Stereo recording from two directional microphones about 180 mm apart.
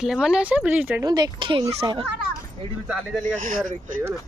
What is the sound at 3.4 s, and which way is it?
Speech, 45° right (ahead or behind).